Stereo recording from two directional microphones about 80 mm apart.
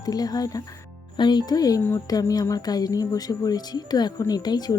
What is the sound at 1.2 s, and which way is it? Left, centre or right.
A woman's voice, left.